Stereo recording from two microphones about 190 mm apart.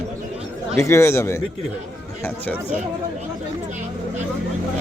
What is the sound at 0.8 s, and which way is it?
Speech, 15° left (ahead or behind).